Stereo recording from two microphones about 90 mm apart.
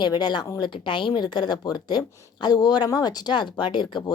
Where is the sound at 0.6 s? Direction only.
65° left (ahead or behind).